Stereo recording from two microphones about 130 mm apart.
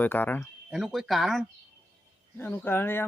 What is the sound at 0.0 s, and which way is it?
Speech, 15° left (ahead or behind).